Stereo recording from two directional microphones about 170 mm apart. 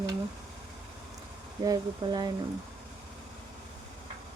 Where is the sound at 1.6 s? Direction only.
20° right (ahead or behind).